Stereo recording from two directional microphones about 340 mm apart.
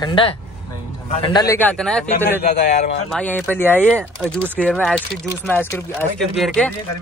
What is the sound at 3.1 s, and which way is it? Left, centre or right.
Speech, centre.